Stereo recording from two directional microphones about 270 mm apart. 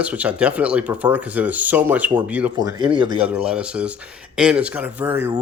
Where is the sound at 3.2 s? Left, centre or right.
Centre.